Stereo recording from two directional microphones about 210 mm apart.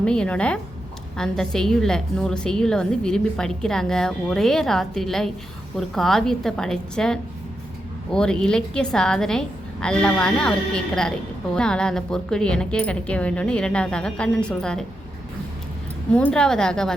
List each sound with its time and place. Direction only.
0.0 s a woman's voice: 5° left (ahead or behind)
11.5 s a woman's voice: 5° left (ahead or behind)
16.1 s a woman's voice: 5° left (ahead or behind)